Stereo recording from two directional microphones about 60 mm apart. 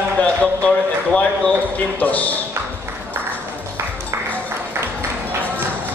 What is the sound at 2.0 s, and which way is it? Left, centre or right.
Speech, left.